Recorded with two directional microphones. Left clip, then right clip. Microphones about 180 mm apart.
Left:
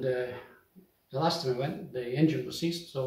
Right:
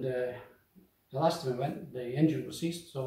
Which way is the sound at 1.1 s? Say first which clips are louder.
Left 1 dB; 5° left (ahead or behind).